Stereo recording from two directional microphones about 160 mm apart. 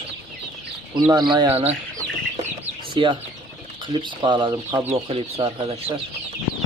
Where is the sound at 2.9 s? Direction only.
30° right (ahead or behind).